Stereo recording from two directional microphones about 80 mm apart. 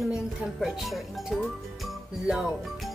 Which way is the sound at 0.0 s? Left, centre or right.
Centre.